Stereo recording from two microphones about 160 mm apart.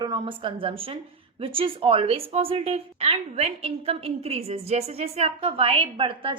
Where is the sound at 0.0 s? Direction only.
30° right (ahead or behind).